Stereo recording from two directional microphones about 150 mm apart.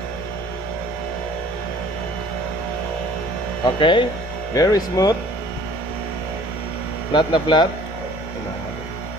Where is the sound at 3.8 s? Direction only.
35° left (ahead or behind).